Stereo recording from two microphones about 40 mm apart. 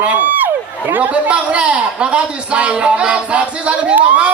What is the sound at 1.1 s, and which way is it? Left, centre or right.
A man's voice, right.